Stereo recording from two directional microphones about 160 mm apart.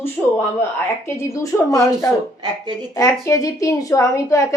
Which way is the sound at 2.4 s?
25° right (ahead or behind).